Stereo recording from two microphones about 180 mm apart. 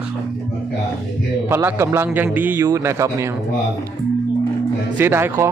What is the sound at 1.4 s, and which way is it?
Speech, 15° right (ahead or behind).